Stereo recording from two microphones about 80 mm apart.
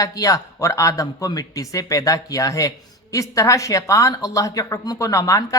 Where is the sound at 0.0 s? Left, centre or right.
Left.